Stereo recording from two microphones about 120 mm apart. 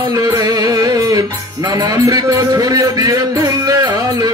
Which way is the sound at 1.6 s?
30° right (ahead or behind).